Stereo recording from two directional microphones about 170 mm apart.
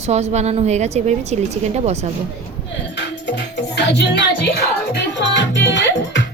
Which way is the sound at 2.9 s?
90° left.